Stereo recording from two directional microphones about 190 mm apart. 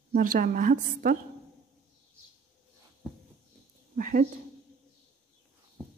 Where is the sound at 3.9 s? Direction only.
45° right (ahead or behind).